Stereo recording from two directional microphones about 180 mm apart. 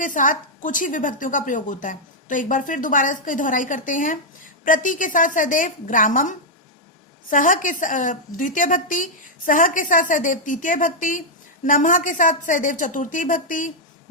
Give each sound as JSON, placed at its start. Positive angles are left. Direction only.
{"t": 0.0, "sound": "a woman's voice", "side_deg": 50}